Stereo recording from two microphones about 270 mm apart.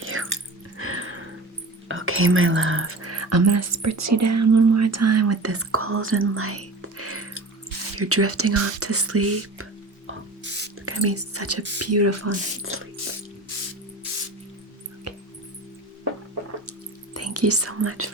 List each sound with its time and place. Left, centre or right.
0.0 s drip: right
0.8 s a sound: right
1.9 s speech: right
10.8 s speech: right
15.1 s music: right
17.2 s speech: right